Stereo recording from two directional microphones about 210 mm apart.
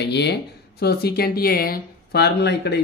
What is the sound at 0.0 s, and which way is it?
Speech, 50° left (ahead or behind).